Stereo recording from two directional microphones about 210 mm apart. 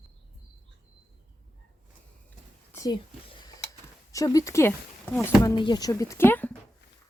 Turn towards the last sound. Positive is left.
turn(degrees=10)  # may be behind; listen again after turning